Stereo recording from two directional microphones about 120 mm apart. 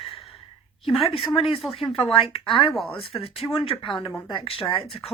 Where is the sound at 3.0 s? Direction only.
55° left (ahead or behind).